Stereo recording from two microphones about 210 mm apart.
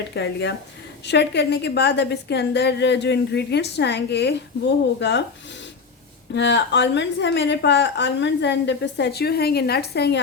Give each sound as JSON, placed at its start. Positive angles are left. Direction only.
{"t": 0.1, "sound": "a woman's voice", "side_deg": 55}
{"t": 6.3, "sound": "a woman's voice", "side_deg": 55}